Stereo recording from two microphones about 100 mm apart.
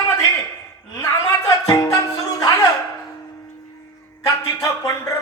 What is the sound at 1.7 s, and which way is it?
Music, 35° left (ahead or behind).